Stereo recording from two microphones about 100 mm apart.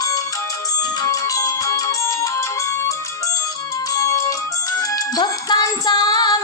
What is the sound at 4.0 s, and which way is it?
Music, 35° left (ahead or behind).